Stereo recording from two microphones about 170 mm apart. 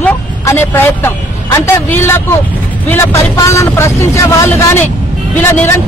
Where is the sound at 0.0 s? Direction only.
10° left (ahead or behind).